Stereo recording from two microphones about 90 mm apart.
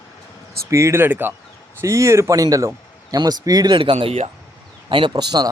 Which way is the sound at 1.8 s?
35° right (ahead or behind).